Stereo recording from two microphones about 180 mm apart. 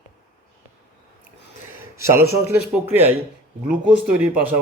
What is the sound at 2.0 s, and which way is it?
A man's voice, 15° right (ahead or behind).